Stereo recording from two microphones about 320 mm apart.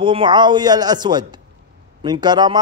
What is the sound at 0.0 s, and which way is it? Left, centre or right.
Speech, centre.